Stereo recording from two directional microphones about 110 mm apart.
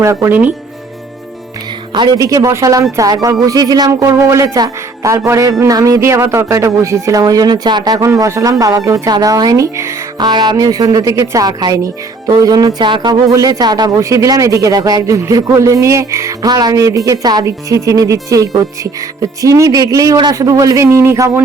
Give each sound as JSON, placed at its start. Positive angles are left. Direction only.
{"t": 0.0, "sound": "speech", "side_deg": -25}
{"t": 1.9, "sound": "speech", "side_deg": -40}
{"t": 10.2, "sound": "speech", "side_deg": -40}
{"t": 13.3, "sound": "speech", "side_deg": -35}